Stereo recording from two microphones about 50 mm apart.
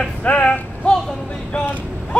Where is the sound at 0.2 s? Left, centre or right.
Left.